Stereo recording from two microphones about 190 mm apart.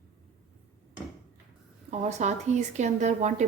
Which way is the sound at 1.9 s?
35° right (ahead or behind).